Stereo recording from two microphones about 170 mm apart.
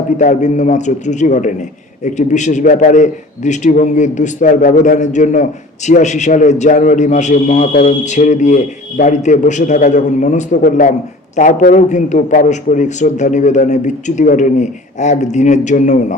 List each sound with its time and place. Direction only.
0.2 s a man's voice: 45° left (ahead or behind)